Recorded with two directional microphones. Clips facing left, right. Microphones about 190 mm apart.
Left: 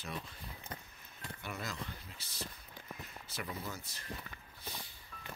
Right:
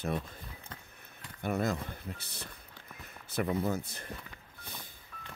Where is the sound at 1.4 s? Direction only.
55° right (ahead or behind).